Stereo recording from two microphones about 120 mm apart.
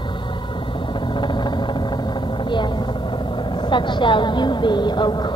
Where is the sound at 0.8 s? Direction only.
40° left (ahead or behind).